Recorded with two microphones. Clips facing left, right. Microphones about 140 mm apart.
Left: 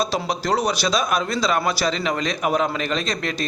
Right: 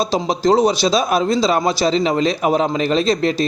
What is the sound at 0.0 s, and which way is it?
Speech, 25° right (ahead or behind).